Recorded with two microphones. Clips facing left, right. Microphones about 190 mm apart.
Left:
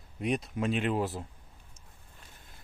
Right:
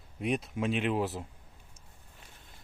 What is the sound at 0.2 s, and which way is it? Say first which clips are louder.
Speech: even; 5° right (ahead or behind).